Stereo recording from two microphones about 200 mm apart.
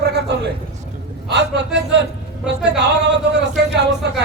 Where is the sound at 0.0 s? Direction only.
60° right (ahead or behind).